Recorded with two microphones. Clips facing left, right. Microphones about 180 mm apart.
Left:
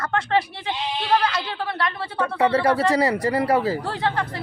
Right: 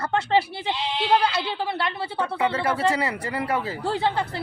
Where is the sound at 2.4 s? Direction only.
35° left (ahead or behind).